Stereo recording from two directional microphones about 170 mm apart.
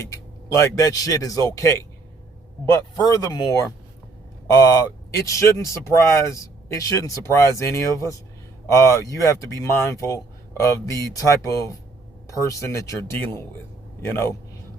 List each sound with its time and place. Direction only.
0.0 s speech: 20° left (ahead or behind)
2.9 s speech: 20° left (ahead or behind)
12.3 s speech: 20° left (ahead or behind)